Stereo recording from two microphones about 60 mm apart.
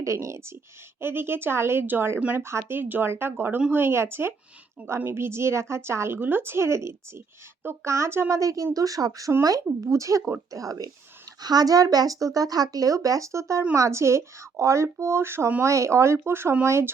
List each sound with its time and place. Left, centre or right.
0.0 s speech: right
1.0 s a woman's voice: right
8.4 s speech: right
9.8 s speech: right
10.5 s speech: right
11.5 s a woman's voice: right
15.6 s a woman's voice: right